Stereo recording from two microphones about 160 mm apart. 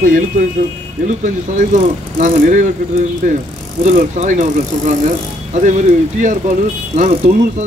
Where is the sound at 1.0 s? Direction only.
50° right (ahead or behind).